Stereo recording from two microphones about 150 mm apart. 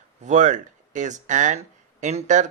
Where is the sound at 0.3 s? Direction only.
55° right (ahead or behind).